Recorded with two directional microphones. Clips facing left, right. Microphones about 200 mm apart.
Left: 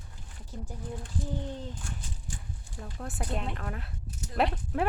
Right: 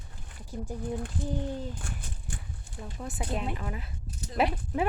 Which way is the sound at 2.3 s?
60° right (ahead or behind).